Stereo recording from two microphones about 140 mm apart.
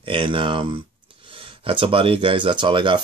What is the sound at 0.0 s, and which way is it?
Speech, 40° right (ahead or behind).